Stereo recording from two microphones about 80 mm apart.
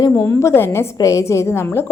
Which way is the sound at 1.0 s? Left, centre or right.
Left.